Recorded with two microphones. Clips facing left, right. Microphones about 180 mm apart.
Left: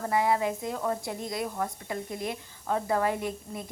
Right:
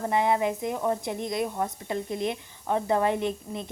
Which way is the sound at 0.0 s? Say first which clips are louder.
Right 2 dB; 20° right (ahead or behind).